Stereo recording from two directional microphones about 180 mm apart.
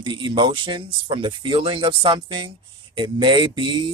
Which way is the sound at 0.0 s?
25° right (ahead or behind).